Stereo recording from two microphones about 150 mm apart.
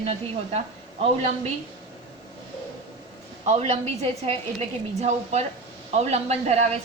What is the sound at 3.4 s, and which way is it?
Speech, 50° right (ahead or behind).